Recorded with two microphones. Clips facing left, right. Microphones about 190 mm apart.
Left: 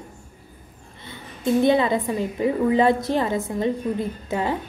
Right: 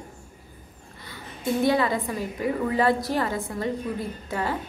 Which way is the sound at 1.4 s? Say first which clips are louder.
Left 4 dB; 20° left (ahead or behind).